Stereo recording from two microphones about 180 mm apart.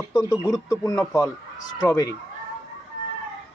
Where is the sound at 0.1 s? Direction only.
20° left (ahead or behind).